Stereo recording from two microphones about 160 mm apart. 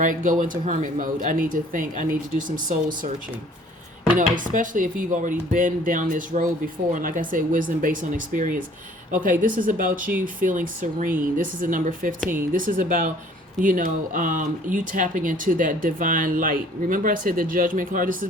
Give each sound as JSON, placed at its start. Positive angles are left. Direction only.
{"t": 0.0, "sound": "speech", "side_deg": -55}
{"t": 4.1, "sound": "speech", "side_deg": -55}